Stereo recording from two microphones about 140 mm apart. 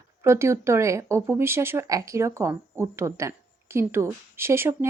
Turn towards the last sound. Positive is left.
turn(degrees=-15)  # may be behind; listen again after turning